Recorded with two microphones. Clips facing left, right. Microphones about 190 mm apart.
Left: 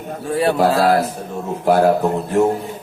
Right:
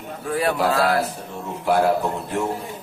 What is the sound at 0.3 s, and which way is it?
A man's voice, 30° left (ahead or behind).